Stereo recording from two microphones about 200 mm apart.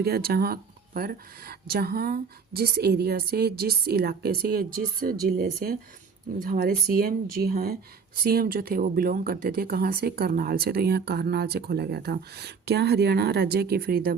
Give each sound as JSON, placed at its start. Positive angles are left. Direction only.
{"t": 0.0, "sound": "speech", "side_deg": -50}